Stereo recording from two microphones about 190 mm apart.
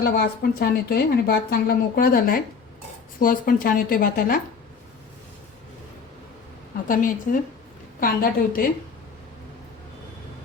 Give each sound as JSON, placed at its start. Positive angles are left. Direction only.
{"t": 0.0, "sound": "a woman's voice", "side_deg": 55}
{"t": 6.8, "sound": "a woman's voice", "side_deg": 45}